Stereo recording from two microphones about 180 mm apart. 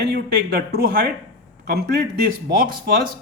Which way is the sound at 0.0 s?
60° right (ahead or behind).